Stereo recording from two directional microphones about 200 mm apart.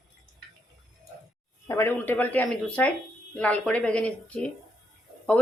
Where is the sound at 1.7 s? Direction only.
10° left (ahead or behind).